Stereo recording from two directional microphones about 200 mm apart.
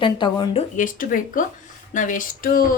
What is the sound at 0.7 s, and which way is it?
A woman's voice, 40° left (ahead or behind).